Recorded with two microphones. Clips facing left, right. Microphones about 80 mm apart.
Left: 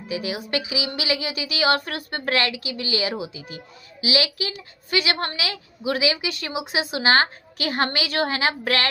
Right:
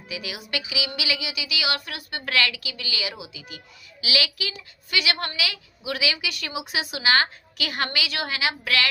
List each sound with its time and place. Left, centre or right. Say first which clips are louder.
0.1 s a woman's voice: left 6 dB; left